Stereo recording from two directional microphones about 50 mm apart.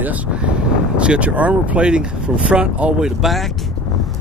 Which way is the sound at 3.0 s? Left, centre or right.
Centre.